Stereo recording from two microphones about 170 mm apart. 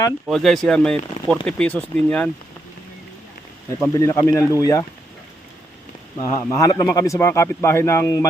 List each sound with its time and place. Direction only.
0.3 s a man's voice: centre (ahead or behind)
3.9 s speech: 20° left (ahead or behind)
6.1 s a man's voice: 15° left (ahead or behind)